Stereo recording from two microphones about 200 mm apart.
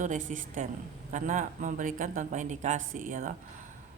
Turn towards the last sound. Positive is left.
turn(degrees=-40)  # may be behind; listen again after turning